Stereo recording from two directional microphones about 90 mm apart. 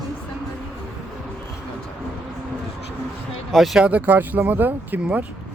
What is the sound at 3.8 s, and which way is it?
Speech, 20° right (ahead or behind).